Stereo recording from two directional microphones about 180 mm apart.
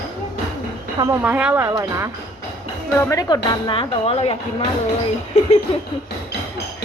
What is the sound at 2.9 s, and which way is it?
Speech, 15° left (ahead or behind).